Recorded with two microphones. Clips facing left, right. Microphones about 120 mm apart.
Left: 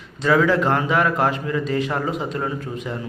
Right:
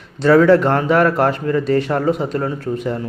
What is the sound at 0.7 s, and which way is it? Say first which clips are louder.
A man's voice: right 5 dB; 45° right (ahead or behind).